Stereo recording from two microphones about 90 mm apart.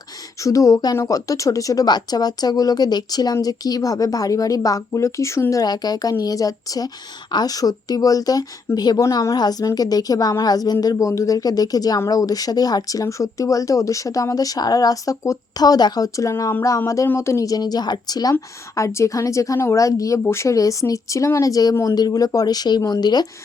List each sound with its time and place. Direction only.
0.4 s a woman's voice: 40° left (ahead or behind)